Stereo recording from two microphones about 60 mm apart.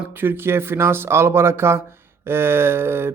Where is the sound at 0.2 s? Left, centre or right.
Right.